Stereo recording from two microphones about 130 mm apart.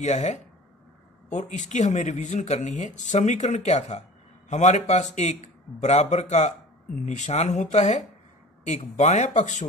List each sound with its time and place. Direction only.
0.0 s speech: 65° left (ahead or behind)